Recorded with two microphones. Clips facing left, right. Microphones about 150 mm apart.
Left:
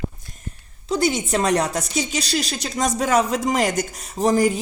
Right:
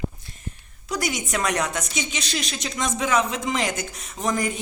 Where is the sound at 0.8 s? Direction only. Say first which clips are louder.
Left 7 dB; 25° left (ahead or behind).